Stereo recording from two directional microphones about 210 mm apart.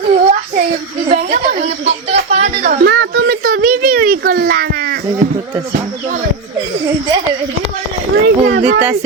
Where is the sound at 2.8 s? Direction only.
50° right (ahead or behind).